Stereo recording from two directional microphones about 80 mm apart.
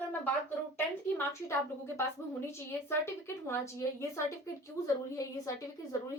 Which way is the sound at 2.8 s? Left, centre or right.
Left.